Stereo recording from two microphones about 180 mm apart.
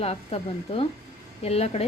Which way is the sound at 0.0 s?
35° left (ahead or behind).